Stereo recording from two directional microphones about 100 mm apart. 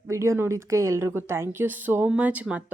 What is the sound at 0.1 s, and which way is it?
Speech, 30° right (ahead or behind).